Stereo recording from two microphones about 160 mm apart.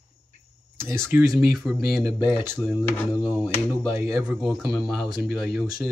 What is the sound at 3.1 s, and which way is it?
Speech, 10° right (ahead or behind).